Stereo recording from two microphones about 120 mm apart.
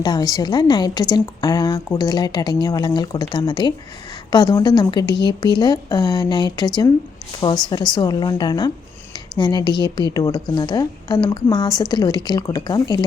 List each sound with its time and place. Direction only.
0.0 s a woman's voice: 35° left (ahead or behind)